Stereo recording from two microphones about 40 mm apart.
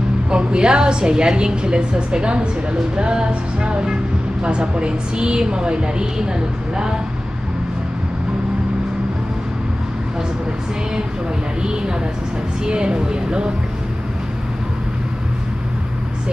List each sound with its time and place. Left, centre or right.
0.3 s speech: right
12.6 s speech: right